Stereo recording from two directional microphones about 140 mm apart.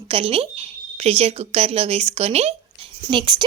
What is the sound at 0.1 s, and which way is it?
Speech, 40° right (ahead or behind).